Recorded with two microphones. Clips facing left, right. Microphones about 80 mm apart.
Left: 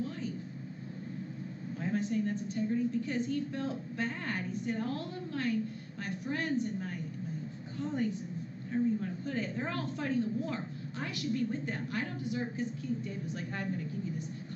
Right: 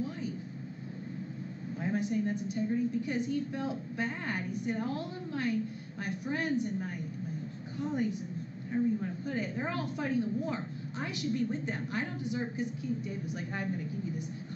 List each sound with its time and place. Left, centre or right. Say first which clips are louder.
1.8 s a woman's voice: right 1 dB; centre